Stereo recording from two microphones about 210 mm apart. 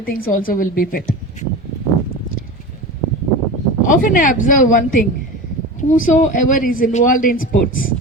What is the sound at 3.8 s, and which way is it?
Speech, 40° left (ahead or behind).